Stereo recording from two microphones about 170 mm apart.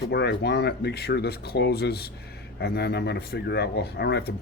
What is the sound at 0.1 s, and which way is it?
Speech, 80° left.